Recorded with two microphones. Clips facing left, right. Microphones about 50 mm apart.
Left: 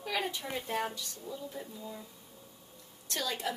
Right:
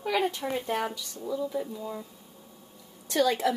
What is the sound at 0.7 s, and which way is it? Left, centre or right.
Speech, right.